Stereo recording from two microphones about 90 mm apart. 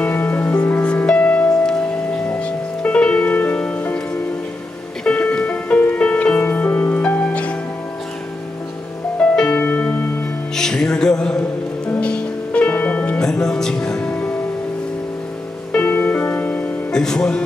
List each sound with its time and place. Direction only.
0.0 s music: 20° left (ahead or behind)
5.0 s music: 15° left (ahead or behind)
9.2 s music: 10° left (ahead or behind)
10.5 s music: 5° left (ahead or behind)
15.7 s music: 20° left (ahead or behind)
16.9 s music: 5° left (ahead or behind)